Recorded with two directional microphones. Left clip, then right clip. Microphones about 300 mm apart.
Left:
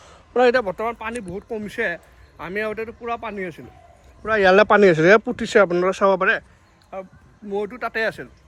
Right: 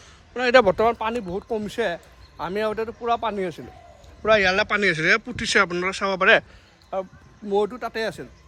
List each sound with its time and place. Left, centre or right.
0.0 s a sound: centre
0.6 s speech: right
4.4 s speech: centre
6.9 s speech: centre